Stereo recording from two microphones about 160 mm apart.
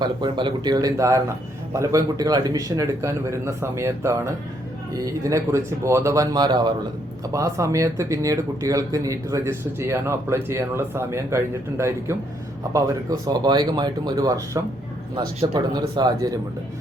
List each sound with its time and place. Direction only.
0.0 s a man's voice: 30° right (ahead or behind)